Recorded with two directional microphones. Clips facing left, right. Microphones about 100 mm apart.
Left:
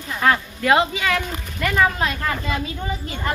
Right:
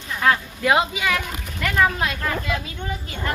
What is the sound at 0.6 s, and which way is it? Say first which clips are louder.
Speech: left 2 dB; 10° right (ahead or behind).